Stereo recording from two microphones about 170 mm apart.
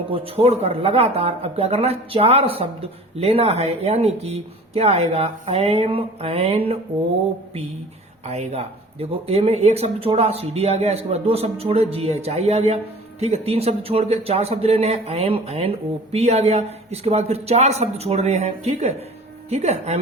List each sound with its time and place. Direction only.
0.1 s speech: 35° right (ahead or behind)
8.2 s speech: 40° right (ahead or behind)